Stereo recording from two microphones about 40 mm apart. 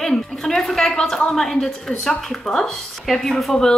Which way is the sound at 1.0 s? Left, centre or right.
Centre.